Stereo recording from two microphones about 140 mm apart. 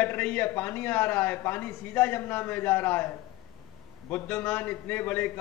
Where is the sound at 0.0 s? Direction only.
10° left (ahead or behind).